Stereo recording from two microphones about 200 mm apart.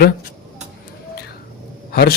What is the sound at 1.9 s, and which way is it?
Speech, 50° left (ahead or behind).